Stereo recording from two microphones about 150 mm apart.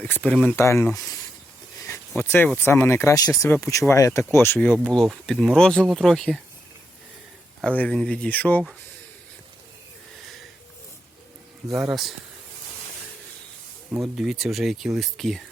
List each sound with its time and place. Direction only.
0.0 s speech: 10° left (ahead or behind)
1.8 s a sound: 15° left (ahead or behind)
2.6 s speech: 15° left (ahead or behind)
7.8 s speech: 5° left (ahead or behind)
11.7 s speech: 5° right (ahead or behind)
13.9 s speech: centre (ahead or behind)